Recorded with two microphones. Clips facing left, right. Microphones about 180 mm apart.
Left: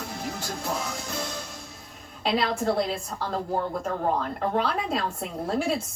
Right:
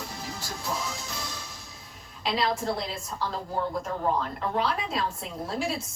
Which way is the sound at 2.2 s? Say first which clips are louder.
Left 3 dB; 55° left (ahead or behind).